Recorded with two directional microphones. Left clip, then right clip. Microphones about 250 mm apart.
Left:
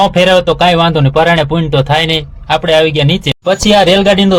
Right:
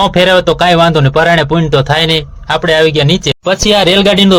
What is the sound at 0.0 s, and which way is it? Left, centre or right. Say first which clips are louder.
A man's voice: even; right.